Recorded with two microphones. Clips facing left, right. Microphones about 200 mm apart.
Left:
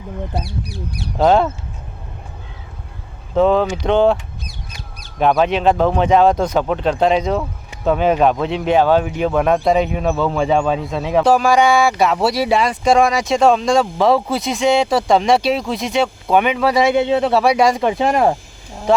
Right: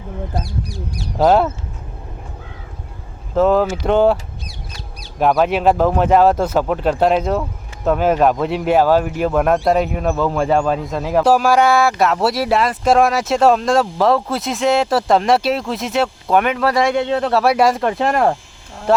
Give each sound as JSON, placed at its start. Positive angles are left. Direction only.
{"t": 0.4, "sound": "speech", "side_deg": 65}
{"t": 1.2, "sound": "speech", "side_deg": -5}
{"t": 3.3, "sound": "speech", "side_deg": -5}
{"t": 5.2, "sound": "speech", "side_deg": -5}